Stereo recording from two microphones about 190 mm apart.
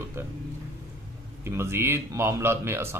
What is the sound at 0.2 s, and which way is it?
Speech, 15° right (ahead or behind).